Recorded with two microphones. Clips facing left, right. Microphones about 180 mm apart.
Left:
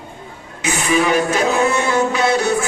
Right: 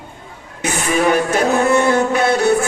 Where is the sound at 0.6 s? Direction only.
55° right (ahead or behind).